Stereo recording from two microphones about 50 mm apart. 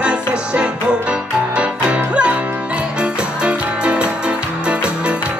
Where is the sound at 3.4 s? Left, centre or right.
Right.